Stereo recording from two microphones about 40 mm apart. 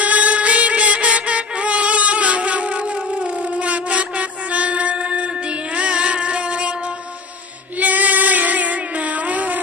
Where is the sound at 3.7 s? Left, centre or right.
Right.